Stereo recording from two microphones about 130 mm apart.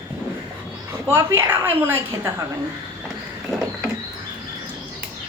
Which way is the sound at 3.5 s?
5° right (ahead or behind).